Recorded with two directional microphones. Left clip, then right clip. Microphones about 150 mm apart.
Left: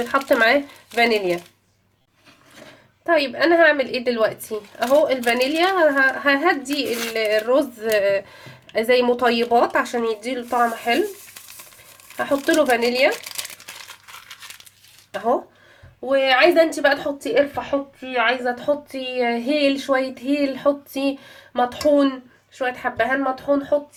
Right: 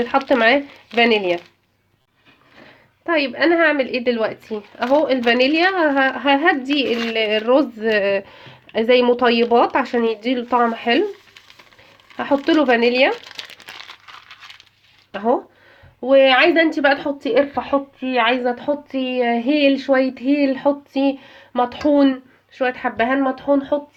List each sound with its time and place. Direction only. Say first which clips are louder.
0.1 s speech: right 1 dB; 30° right (ahead or behind)
3.1 s speech: even; 15° right (ahead or behind); by 6.8 s 40° right (ahead or behind)
6.8 s speech: right 4 dB; 15° right (ahead or behind)
7.1 s speech: right 1 dB; 40° right (ahead or behind)
12.1 s speech: right 1 dB; 40° right (ahead or behind)
15.1 s speech: right 2 dB; 35° right (ahead or behind)
16.0 s a woman's voice: right 3 dB; 45° right (ahead or behind)